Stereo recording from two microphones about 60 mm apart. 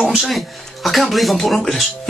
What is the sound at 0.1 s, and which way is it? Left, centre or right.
Speech, centre.